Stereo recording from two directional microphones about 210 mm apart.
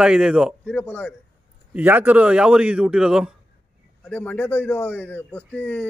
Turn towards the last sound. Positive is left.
turn(degrees=5)  # may be behind; listen again after turning